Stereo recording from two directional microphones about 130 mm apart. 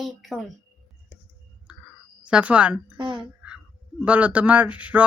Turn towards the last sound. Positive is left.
turn(degrees=-10)  # may be behind; listen again after turning